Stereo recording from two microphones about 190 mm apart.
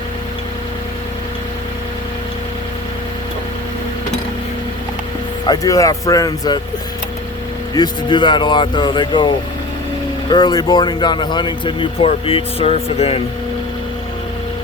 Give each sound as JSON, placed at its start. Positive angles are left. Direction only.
{"t": 5.5, "sound": "a man's voice", "side_deg": 20}
{"t": 7.8, "sound": "a man's voice", "side_deg": 25}